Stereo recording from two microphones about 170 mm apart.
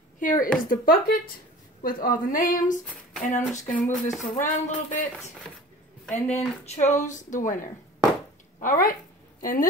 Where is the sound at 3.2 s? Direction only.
45° left (ahead or behind).